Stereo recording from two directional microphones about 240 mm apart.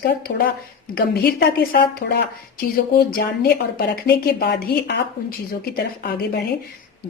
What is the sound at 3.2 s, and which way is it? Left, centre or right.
A woman's voice, left.